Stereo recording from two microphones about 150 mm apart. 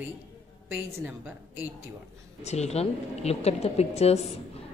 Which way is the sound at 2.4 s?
45° left (ahead or behind).